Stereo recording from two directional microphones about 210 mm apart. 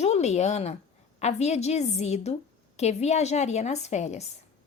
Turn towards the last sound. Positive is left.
turn(degrees=30)  # may be behind; listen again after turning